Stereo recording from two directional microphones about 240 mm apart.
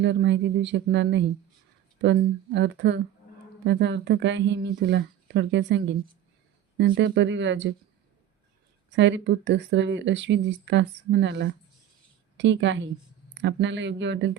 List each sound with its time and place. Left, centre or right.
0.0 s speech: right
9.0 s speech: right